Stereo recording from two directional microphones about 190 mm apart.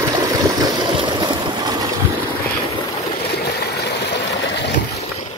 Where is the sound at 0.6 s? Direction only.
25° right (ahead or behind).